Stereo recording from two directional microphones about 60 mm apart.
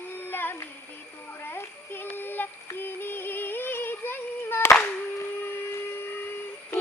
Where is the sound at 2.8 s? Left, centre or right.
Left.